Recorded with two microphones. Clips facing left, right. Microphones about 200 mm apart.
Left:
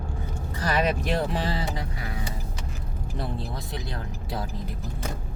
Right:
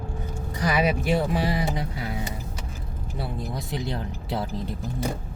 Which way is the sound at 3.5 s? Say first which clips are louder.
Right 5 dB; 20° right (ahead or behind).